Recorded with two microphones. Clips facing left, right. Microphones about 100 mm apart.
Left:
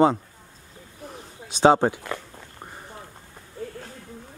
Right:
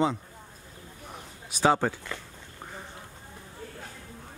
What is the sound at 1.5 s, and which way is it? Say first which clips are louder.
Speech: left 6 dB; 25° left (ahead or behind).